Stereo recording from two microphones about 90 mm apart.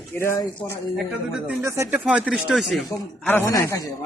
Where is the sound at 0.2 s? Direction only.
30° left (ahead or behind).